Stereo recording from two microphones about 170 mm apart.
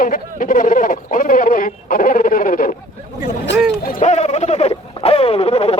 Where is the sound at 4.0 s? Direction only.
40° left (ahead or behind).